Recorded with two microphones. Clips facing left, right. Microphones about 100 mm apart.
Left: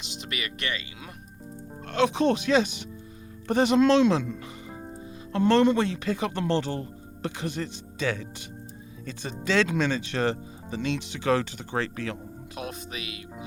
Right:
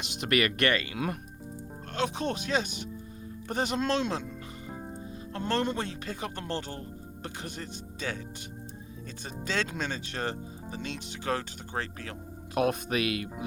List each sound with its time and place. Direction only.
0.0 s speech: 55° right (ahead or behind)
1.9 s speech: 90° left
4.7 s music: centre (ahead or behind)
5.3 s speech: 90° left
12.5 s speech: 60° right (ahead or behind)